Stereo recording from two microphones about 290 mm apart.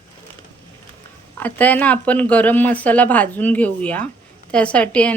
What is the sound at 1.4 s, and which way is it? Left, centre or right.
Speech, centre.